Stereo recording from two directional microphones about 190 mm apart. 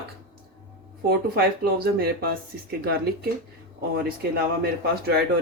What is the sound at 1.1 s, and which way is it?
Speech, 55° right (ahead or behind).